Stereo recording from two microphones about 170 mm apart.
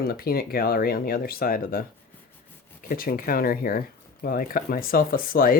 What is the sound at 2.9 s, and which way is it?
Speech, 55° left (ahead or behind).